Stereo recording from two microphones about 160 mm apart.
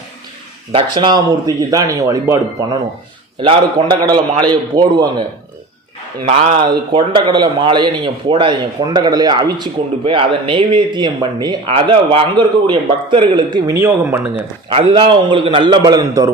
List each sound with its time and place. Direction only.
0.7 s speech: 30° right (ahead or behind)
6.2 s a man's voice: 45° right (ahead or behind)
6.7 s speech: 30° right (ahead or behind); by 14.4 s 15° right (ahead or behind)
14.7 s speech: 30° right (ahead or behind)